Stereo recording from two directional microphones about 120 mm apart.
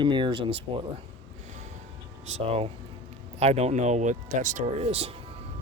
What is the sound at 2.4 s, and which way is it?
Speech, 55° right (ahead or behind).